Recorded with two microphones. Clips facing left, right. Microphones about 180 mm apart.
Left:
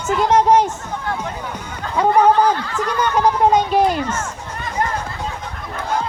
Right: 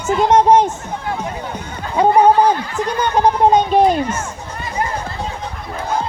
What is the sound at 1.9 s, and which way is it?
A child's voice, 20° right (ahead or behind).